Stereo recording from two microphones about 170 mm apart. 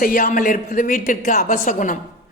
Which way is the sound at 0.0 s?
55° left (ahead or behind).